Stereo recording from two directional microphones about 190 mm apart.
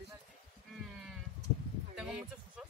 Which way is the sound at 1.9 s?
5° right (ahead or behind).